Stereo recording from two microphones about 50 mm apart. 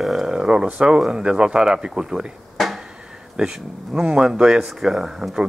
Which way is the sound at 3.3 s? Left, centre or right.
Centre.